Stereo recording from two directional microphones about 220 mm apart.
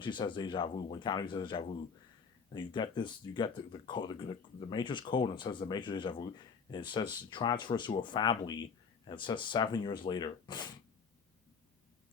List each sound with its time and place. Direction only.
0.0 s speech: 20° left (ahead or behind)